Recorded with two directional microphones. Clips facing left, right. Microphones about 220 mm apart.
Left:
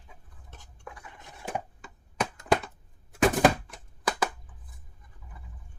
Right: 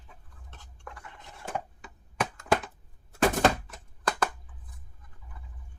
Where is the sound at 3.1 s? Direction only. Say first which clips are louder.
Left 2 dB; 15° left (ahead or behind).